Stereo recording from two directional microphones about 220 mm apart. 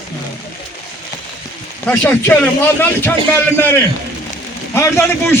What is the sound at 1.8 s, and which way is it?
Speech, 5° left (ahead or behind).